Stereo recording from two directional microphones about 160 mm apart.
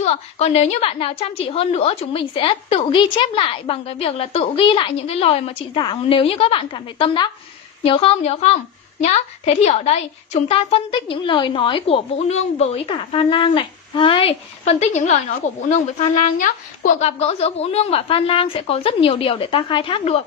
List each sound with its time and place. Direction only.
0.0 s a woman's voice: 40° left (ahead or behind)
14.6 s a woman's voice: 45° left (ahead or behind)